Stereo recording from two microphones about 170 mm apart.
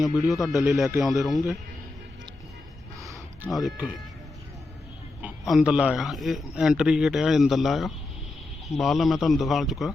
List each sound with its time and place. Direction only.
0.0 s speech: 20° left (ahead or behind)
0.9 s speech: centre (ahead or behind)
3.0 s a sound: 20° right (ahead or behind)
3.5 s speech: centre (ahead or behind)
5.2 s speech: 5° right (ahead or behind)